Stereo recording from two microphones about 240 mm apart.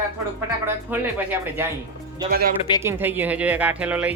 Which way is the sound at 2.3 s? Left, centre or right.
Right.